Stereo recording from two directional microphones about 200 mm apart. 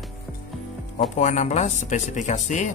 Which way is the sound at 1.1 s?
35° left (ahead or behind).